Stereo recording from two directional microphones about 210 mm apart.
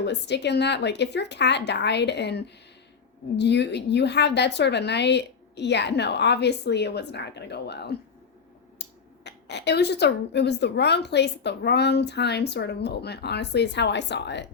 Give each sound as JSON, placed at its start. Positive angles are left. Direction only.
{"t": 0.0, "sound": "speech", "side_deg": 55}